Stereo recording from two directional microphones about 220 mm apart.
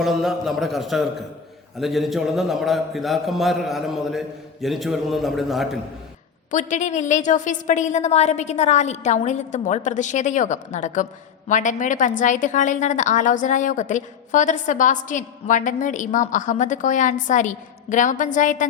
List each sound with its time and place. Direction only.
0.0 s a man's voice: centre (ahead or behind)
6.5 s a woman's voice: 35° left (ahead or behind)